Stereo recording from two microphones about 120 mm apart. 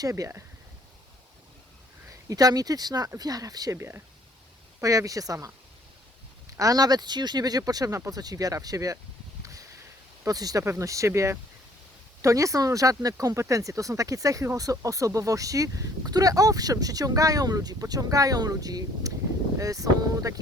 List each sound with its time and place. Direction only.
0.0 s speech: 25° right (ahead or behind)
2.0 s speech: 30° right (ahead or behind)
6.6 s speech: 30° right (ahead or behind)
9.4 s a sound: 30° right (ahead or behind)
10.2 s speech: 30° right (ahead or behind)